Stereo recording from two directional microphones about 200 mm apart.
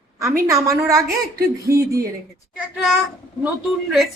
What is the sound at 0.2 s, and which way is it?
Speech, 15° right (ahead or behind).